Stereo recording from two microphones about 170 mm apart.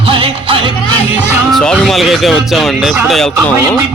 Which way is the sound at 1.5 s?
5° left (ahead or behind).